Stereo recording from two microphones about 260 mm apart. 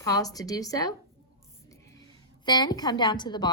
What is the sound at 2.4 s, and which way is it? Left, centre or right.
A woman's voice, centre.